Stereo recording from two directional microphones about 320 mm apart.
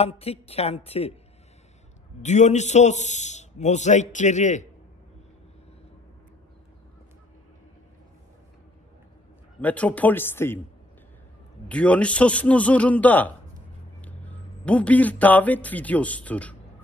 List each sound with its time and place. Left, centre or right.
0.0 s a man's voice: centre
2.2 s a man's voice: left
9.6 s a man's voice: centre
11.7 s a man's voice: centre